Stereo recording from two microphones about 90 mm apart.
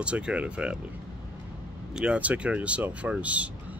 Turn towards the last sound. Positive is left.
turn(degrees=-15)  # may be behind; listen again after turning